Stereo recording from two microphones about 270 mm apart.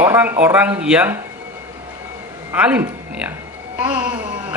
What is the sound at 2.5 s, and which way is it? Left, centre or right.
Speech, centre.